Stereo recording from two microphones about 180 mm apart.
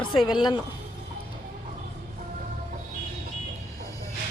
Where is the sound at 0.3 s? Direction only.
25° left (ahead or behind).